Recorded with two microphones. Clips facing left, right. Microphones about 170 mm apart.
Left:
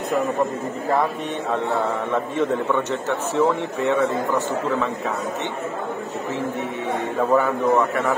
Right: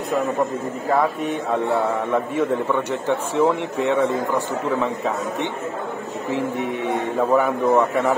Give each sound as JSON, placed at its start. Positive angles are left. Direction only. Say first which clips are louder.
{"t": 2.3, "sound": "speech", "louder": "even", "side_deg": -15}
{"t": 7.2, "sound": "speech", "louder": "even", "side_deg": -15}